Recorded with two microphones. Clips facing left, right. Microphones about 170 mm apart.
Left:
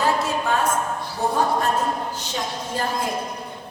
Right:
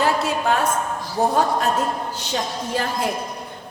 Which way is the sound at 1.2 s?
65° right (ahead or behind).